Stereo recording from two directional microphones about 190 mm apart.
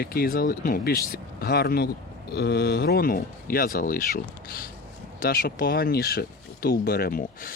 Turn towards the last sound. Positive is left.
turn(degrees=45)  # may be behind; listen again after turning